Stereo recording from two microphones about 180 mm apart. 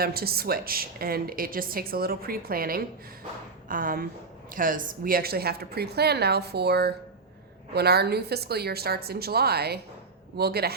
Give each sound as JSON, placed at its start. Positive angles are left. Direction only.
{"t": 0.0, "sound": "a woman's voice", "side_deg": -55}